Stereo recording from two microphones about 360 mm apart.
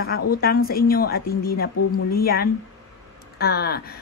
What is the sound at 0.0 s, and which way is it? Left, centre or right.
A woman's voice, left.